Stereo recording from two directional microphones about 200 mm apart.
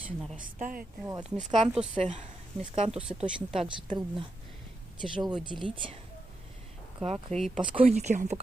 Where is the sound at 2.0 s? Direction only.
35° right (ahead or behind).